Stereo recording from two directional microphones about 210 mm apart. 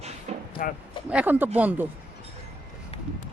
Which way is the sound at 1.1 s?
5° right (ahead or behind).